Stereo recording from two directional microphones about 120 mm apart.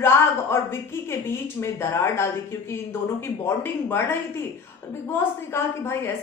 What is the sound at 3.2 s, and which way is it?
A woman's voice, 20° left (ahead or behind).